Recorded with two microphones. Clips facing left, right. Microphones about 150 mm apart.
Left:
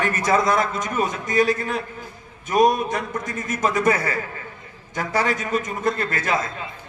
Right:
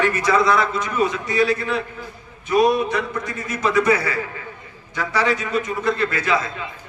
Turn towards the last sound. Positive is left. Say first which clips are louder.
# right 3 dB
turn(degrees=45)  # may be behind; listen again after turning